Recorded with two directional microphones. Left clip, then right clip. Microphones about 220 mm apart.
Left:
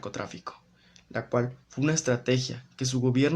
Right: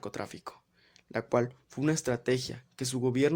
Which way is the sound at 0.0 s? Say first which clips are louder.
Left 3 dB; 40° right (ahead or behind).